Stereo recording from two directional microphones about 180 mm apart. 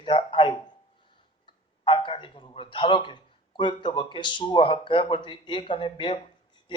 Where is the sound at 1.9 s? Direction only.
30° left (ahead or behind).